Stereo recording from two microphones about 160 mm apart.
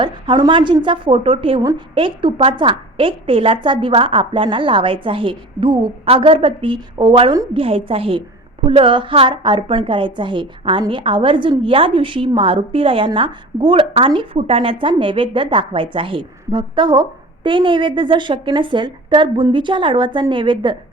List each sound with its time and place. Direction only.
0.0 s a woman's voice: 30° right (ahead or behind)